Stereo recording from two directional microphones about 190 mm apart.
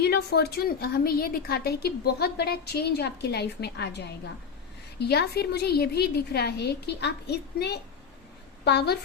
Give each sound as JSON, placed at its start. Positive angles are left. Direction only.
{"t": 0.0, "sound": "a woman's voice", "side_deg": 60}